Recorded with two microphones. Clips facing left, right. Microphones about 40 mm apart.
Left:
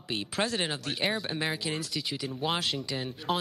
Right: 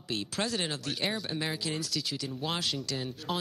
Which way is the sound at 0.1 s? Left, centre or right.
Centre.